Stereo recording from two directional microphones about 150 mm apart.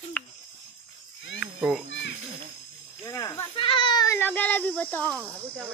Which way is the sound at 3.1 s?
20° left (ahead or behind).